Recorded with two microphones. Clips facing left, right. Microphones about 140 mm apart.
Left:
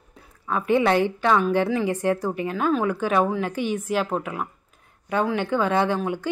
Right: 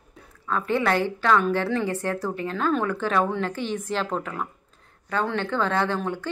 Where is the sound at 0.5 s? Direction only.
15° left (ahead or behind).